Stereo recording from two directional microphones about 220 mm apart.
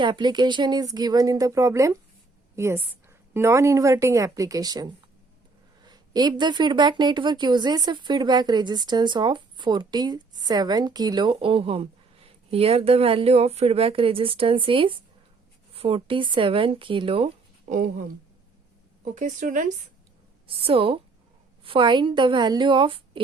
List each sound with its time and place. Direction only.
0.0 s speech: 20° right (ahead or behind); by 18.0 s 40° right (ahead or behind)
19.0 s speech: 35° right (ahead or behind)
20.5 s speech: 25° right (ahead or behind)